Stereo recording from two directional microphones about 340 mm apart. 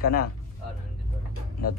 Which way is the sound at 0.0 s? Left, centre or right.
Left.